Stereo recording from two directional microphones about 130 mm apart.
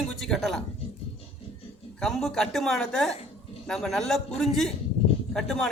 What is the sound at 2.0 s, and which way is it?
Speech, 5° left (ahead or behind).